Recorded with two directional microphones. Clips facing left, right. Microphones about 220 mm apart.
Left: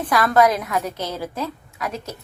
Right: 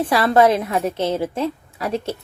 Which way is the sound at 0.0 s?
30° right (ahead or behind).